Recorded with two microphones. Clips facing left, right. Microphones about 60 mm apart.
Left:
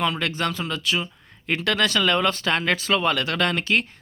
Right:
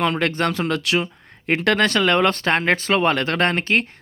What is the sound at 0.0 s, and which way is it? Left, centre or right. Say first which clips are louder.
Speech: right 4 dB; right.